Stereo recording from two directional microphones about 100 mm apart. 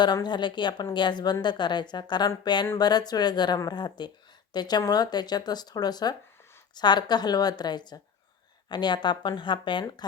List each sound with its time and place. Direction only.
0.0 s a woman's voice: 45° left (ahead or behind)